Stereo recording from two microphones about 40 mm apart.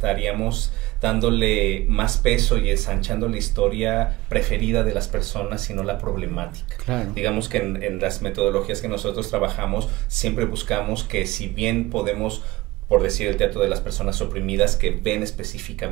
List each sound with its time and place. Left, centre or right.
0.0 s speech: centre